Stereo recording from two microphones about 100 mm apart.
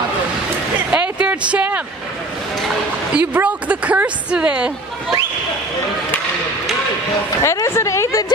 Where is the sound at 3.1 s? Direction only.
15° right (ahead or behind).